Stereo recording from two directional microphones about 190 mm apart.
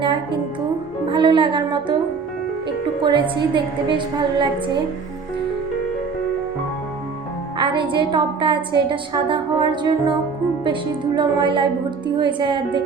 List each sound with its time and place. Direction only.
0.0 s a woman's voice: 25° right (ahead or behind)
3.0 s a woman's voice: 25° right (ahead or behind)
7.6 s a woman's voice: 25° right (ahead or behind)